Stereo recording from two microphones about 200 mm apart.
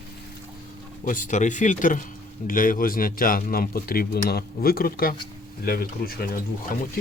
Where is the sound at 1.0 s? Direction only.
40° left (ahead or behind).